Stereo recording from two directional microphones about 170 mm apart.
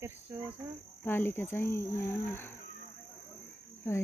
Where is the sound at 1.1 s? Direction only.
10° left (ahead or behind).